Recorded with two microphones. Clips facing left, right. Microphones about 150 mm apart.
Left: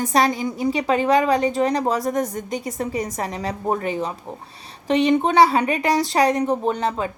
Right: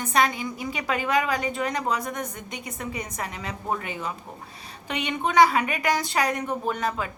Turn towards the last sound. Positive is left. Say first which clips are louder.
# left 5 dB
turn(degrees=30)  # may be behind; listen again after turning